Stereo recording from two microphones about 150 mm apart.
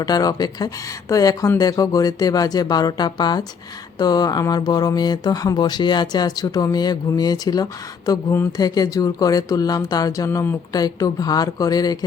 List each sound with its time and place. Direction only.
0.0 s speech: 25° left (ahead or behind)